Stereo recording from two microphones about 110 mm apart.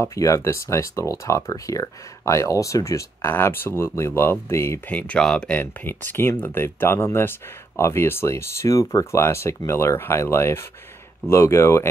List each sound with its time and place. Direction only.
0.0 s speech: 30° left (ahead or behind); by 5.6 s 5° left (ahead or behind)
5.6 s speech: 20° left (ahead or behind)